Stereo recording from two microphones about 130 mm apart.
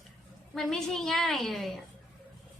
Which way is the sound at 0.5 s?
5° left (ahead or behind).